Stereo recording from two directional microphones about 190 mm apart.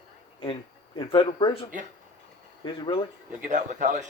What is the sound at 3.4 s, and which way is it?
Speech, 40° right (ahead or behind).